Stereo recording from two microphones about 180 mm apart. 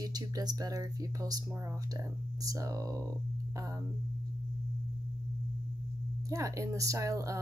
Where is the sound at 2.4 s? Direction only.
20° right (ahead or behind).